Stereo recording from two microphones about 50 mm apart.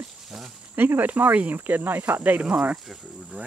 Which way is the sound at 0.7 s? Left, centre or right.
Right.